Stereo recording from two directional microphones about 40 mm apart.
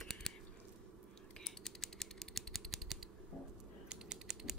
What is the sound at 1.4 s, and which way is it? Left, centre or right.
Mechanisms, centre.